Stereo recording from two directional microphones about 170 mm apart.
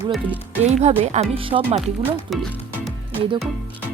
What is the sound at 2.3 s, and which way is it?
Speech, centre (ahead or behind).